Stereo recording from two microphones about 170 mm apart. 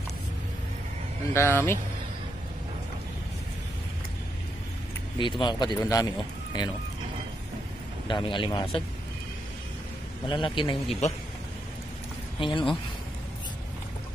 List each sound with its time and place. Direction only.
1.3 s speech: 15° left (ahead or behind)
5.2 s speech: 30° left (ahead or behind)
8.1 s speech: 30° left (ahead or behind)
10.2 s speech: 30° left (ahead or behind)
12.4 s speech: 30° left (ahead or behind)